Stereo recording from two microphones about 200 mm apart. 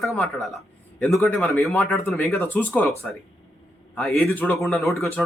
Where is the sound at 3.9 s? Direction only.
Centre (ahead or behind).